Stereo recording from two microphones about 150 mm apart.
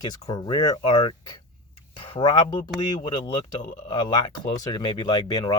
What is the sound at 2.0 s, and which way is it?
Speech, 30° left (ahead or behind).